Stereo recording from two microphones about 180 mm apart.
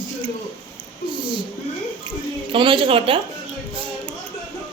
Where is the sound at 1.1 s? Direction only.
25° right (ahead or behind).